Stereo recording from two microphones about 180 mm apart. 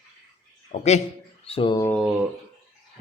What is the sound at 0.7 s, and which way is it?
Speech, 40° left (ahead or behind).